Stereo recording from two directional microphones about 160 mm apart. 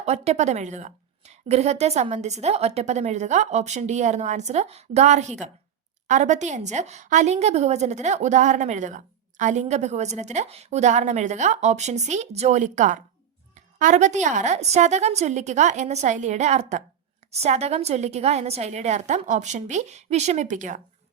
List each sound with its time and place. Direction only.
0.0 s a woman's voice: 45° right (ahead or behind)